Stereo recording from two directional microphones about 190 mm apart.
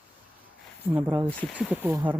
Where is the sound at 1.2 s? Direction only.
10° left (ahead or behind).